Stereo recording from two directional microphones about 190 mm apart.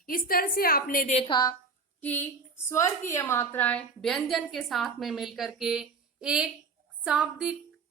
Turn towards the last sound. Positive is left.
turn(degrees=-5)  # may be behind; listen again after turning